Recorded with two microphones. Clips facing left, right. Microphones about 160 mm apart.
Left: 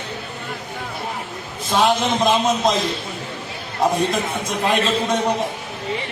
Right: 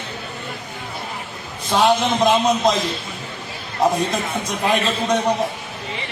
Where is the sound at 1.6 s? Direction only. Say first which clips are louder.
Right 1 dB; centre (ahead or behind).